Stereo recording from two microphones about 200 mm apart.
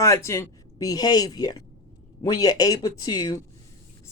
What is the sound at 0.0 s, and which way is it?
Speech, 15° left (ahead or behind).